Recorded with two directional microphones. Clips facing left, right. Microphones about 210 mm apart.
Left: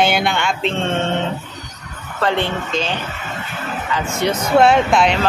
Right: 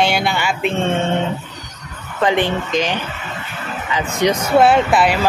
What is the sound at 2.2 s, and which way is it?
Speech, 15° right (ahead or behind).